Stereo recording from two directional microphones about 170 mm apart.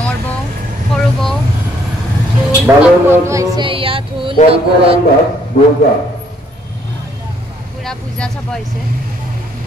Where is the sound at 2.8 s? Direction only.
15° right (ahead or behind); by 4.3 s 30° right (ahead or behind).